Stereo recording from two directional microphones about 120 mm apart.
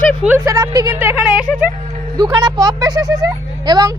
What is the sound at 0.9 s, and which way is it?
Speech, 15° right (ahead or behind).